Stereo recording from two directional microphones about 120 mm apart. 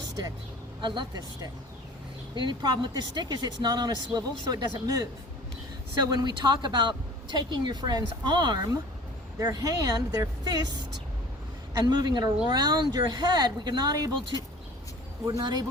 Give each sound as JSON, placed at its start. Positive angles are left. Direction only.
{"t": 0.8, "sound": "speech", "side_deg": -40}
{"t": 11.9, "sound": "speech", "side_deg": -35}
{"t": 15.2, "sound": "speech", "side_deg": -30}